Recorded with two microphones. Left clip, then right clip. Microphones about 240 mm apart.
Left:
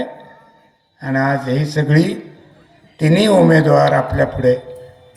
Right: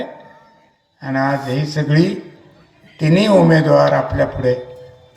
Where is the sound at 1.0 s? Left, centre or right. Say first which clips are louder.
Left 1 dB; left.